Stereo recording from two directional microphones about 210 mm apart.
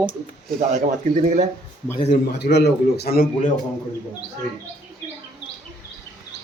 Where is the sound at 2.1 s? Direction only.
50° left (ahead or behind).